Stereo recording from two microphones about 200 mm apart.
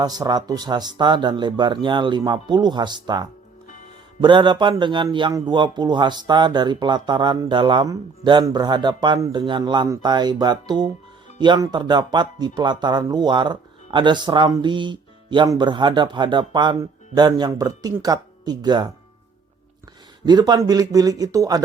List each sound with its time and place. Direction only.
0.0 s a man's voice: 20° right (ahead or behind)
20.2 s a man's voice: 20° right (ahead or behind)